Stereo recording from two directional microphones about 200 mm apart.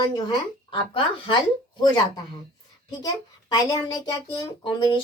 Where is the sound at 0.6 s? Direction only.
25° left (ahead or behind).